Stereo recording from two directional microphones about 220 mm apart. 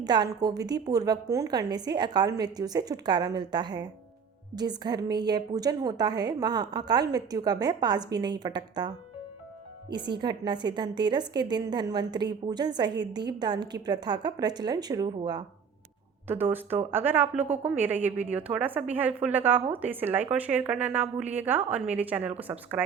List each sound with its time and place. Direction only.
0.0 s a woman's voice: 20° right (ahead or behind)
9.9 s a woman's voice: 20° right (ahead or behind)